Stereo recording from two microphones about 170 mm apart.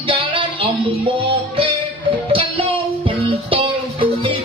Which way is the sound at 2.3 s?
30° right (ahead or behind).